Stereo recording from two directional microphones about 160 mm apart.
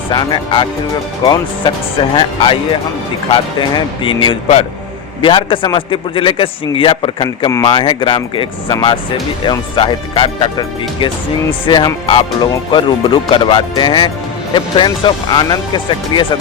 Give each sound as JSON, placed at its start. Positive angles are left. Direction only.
{"t": 0.1, "sound": "a man's voice", "side_deg": 25}
{"t": 11.6, "sound": "a man's voice", "side_deg": 30}